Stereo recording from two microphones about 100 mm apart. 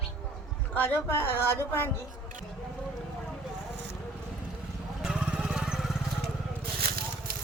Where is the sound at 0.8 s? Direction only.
20° left (ahead or behind).